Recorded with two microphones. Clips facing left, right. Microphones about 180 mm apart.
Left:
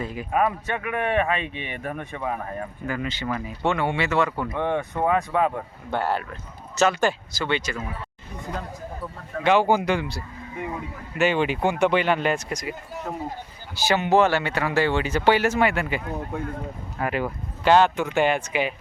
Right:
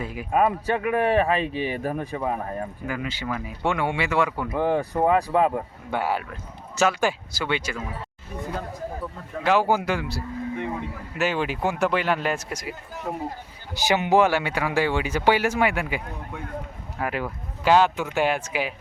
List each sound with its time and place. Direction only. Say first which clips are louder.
0.0 s speech: left 1 dB; 10° right (ahead or behind)
0.3 s speech: right 3 dB; 30° right (ahead or behind)
2.8 s speech: left 4 dB; 10° right (ahead or behind)
5.0 s speech: right 2 dB; 30° right (ahead or behind)
5.5 s speech: right 1 dB; 10° right (ahead or behind)
9.4 s speech: left 2 dB; 5° right (ahead or behind)
13.7 s speech: even; 15° right (ahead or behind)
17.0 s speech: left 2 dB; centre (ahead or behind)